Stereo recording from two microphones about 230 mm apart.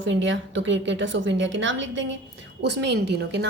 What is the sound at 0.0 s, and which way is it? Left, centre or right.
A woman's voice, right.